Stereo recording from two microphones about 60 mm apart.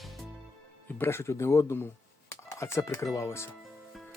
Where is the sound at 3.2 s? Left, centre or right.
Left.